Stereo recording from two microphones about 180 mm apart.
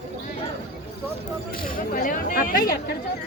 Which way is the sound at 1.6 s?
50° left (ahead or behind).